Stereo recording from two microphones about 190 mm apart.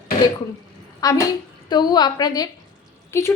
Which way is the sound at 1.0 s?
15° left (ahead or behind).